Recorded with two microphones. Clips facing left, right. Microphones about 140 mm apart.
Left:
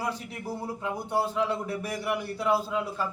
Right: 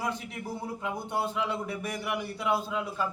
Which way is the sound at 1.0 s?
35° left (ahead or behind).